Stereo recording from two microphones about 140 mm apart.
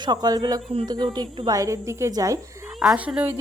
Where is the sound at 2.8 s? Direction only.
5° right (ahead or behind).